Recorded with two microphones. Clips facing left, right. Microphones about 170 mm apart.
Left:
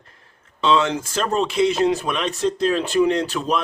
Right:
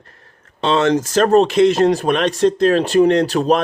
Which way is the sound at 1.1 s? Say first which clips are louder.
Right 9 dB; 60° right (ahead or behind).